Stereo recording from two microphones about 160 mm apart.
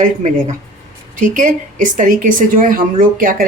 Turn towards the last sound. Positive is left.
turn(degrees=-60)  # may be behind; listen again after turning